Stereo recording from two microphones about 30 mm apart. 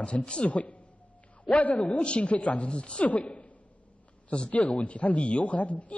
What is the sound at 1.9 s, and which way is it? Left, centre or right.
Speech, left.